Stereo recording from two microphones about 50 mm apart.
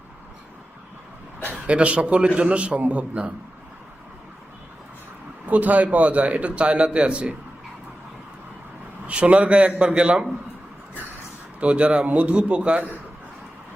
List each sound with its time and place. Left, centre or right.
1.6 s a man's voice: right
5.5 s a man's voice: right
9.0 s a man's voice: right
11.6 s a man's voice: right